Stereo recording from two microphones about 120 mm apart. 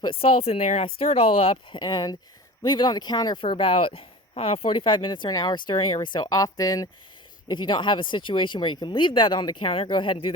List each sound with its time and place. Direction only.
0.0 s speech: 50° left (ahead or behind); by 0.9 s 65° left (ahead or behind)
0.9 s speech: 55° left (ahead or behind)
1.8 s speech: 35° left (ahead or behind)